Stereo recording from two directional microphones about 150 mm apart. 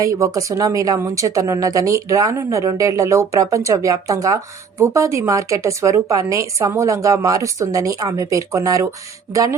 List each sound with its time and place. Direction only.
0.0 s a woman's voice: 20° right (ahead or behind)